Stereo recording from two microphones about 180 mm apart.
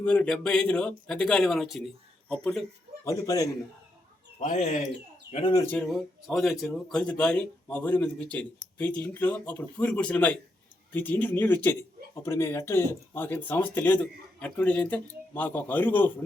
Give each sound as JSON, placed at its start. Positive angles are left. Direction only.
{"t": 0.0, "sound": "speech", "side_deg": 5}
{"t": 3.0, "sound": "a man's voice", "side_deg": 20}
{"t": 4.4, "sound": "speech", "side_deg": 40}
{"t": 5.3, "sound": "a man's voice", "side_deg": 30}
{"t": 5.6, "sound": "speech", "side_deg": 5}